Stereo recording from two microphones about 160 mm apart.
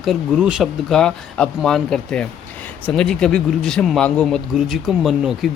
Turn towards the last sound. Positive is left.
turn(degrees=0)  # may be behind; listen again after turning